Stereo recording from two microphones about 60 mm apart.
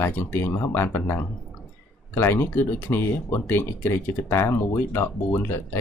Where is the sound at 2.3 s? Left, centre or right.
Left.